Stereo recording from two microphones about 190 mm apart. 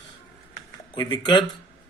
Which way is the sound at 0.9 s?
25° left (ahead or behind).